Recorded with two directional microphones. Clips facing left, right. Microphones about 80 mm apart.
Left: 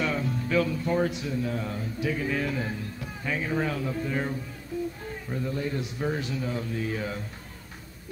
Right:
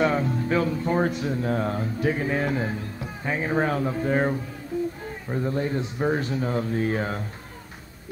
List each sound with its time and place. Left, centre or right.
0.0 s speech: right